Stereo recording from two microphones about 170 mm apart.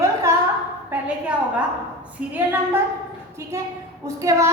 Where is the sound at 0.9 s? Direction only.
10° right (ahead or behind).